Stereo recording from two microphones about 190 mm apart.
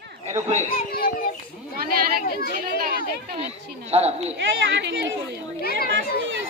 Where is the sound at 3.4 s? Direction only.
35° right (ahead or behind).